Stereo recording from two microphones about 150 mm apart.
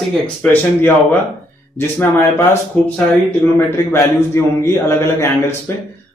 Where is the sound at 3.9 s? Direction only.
20° left (ahead or behind).